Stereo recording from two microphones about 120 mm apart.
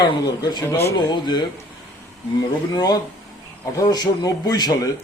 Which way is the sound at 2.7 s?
35° left (ahead or behind).